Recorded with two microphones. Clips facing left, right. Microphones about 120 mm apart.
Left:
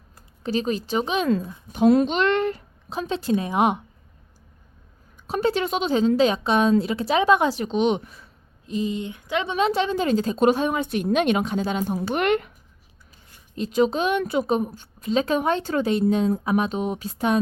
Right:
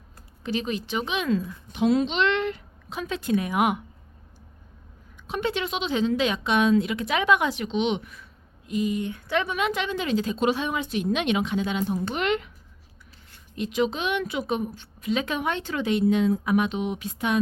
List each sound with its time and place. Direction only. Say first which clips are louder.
0.4 s a woman's voice: left 4 dB; 35° left (ahead or behind)
5.3 s a woman's voice: left 5 dB; 40° left (ahead or behind); by 12.5 s 55° left (ahead or behind)
13.6 s a woman's voice: left 5 dB; 40° left (ahead or behind)